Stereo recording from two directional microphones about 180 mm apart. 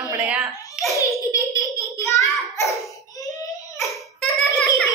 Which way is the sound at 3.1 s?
20° left (ahead or behind).